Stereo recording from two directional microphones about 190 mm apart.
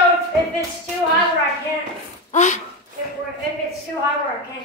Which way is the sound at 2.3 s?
40° left (ahead or behind).